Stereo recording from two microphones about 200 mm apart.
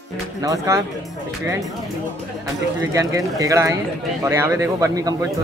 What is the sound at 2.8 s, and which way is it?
Speech, 15° right (ahead or behind).